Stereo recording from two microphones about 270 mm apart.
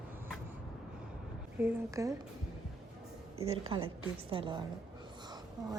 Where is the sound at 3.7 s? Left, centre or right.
Centre.